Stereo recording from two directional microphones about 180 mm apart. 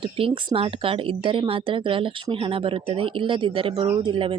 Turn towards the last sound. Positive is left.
turn(degrees=-30)  # may be behind; listen again after turning